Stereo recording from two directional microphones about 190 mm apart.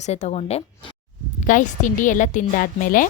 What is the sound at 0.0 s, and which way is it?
A woman's voice, 35° left (ahead or behind).